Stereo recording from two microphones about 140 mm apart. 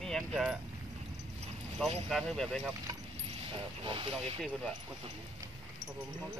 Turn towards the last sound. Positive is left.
turn(degrees=5)  # may be behind; listen again after turning